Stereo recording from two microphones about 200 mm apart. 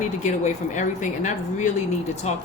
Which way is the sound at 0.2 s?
35° left (ahead or behind).